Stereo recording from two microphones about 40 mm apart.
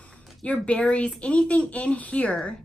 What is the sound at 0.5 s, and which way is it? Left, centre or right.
A woman's voice, left.